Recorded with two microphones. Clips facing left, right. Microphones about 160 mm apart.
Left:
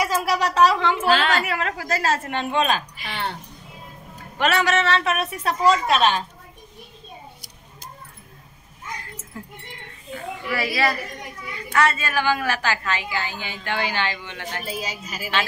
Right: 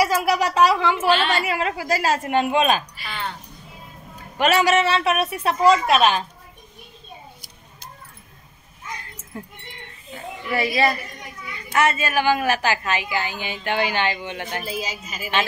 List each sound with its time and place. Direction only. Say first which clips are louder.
0.0 s a woman's voice: right 3 dB; 10° right (ahead or behind)
4.4 s a woman's voice: right 3 dB; 15° right (ahead or behind)
10.1 s a woman's voice: right 1 dB; 20° right (ahead or behind)
14.6 s a woman's voice: right 1 dB; centre (ahead or behind)